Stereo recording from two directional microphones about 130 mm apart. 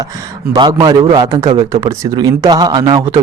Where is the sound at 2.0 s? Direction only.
30° right (ahead or behind).